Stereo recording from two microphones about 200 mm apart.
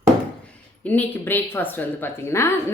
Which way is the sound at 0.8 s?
10° left (ahead or behind).